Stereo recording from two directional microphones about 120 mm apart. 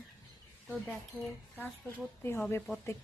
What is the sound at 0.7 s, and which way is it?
A woman's voice, 5° left (ahead or behind).